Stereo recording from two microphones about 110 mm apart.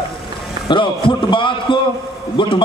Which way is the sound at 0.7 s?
50° left (ahead or behind).